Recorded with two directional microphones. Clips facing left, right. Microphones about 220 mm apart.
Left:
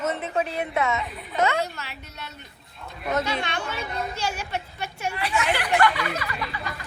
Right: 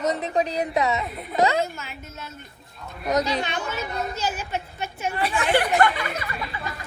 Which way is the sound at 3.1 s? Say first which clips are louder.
Right 3 dB; 35° right (ahead or behind).